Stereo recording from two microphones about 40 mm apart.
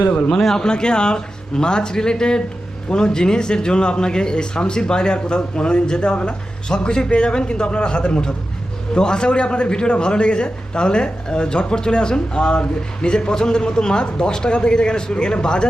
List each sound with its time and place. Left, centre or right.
0.3 s a man's voice: centre